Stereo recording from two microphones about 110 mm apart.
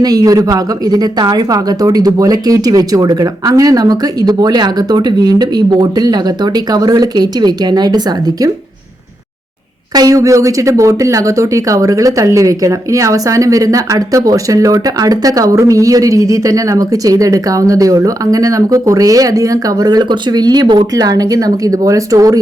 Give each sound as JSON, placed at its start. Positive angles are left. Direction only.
{"t": 0.0, "sound": "speech", "side_deg": -35}
{"t": 9.9, "sound": "speech", "side_deg": -35}